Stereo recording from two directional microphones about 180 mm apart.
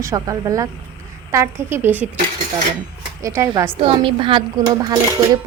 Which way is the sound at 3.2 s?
15° right (ahead or behind).